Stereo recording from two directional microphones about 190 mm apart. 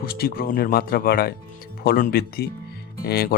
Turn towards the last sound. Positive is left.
turn(degrees=55)  # may be behind; listen again after turning